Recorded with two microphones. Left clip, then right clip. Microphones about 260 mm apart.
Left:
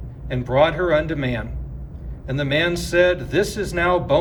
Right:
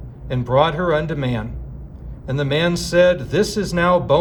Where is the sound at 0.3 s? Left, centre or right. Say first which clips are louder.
Right 1 dB; centre.